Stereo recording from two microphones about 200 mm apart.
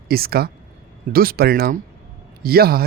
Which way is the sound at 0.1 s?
50° right (ahead or behind).